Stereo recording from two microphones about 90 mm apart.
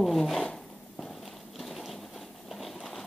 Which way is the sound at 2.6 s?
Centre (ahead or behind).